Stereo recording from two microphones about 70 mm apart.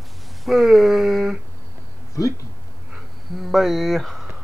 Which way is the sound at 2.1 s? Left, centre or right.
Left.